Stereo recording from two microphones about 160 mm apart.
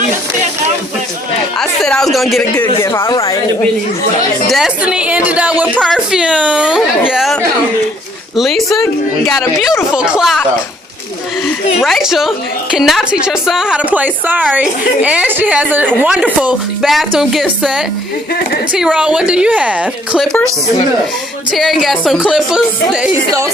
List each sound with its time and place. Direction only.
1.5 s a sound: 5° left (ahead or behind)
2.8 s speech: 15° left (ahead or behind)
4.4 s a woman's voice: centre (ahead or behind)
8.4 s speech: centre (ahead or behind)
8.8 s a woman's voice: 15° left (ahead or behind)
9.9 s speech: 5° right (ahead or behind)
11.8 s a woman's voice: centre (ahead or behind)
20.2 s speech: 5° left (ahead or behind)
21.5 s speech: centre (ahead or behind)